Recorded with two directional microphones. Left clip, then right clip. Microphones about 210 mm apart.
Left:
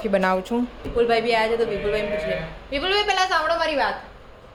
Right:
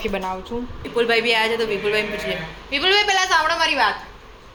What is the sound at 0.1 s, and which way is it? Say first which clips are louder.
Speech: left 5 dB; 35° left (ahead or behind).